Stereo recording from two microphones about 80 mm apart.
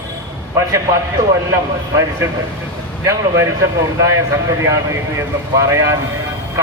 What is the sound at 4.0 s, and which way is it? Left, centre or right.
Speech, right.